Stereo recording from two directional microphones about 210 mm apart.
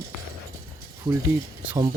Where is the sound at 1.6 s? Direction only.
15° right (ahead or behind).